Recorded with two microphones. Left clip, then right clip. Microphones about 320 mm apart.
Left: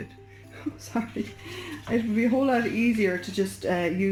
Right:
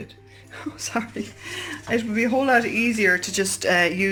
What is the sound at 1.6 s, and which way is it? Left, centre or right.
Speech, right.